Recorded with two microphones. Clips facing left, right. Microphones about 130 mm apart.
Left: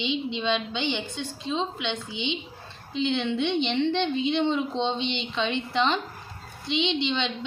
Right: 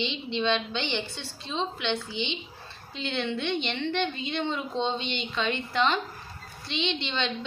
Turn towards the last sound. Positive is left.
turn(degrees=15)  # may be behind; listen again after turning